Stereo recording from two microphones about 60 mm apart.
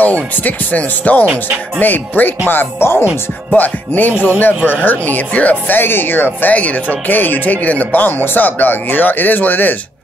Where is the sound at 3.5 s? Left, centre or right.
Left.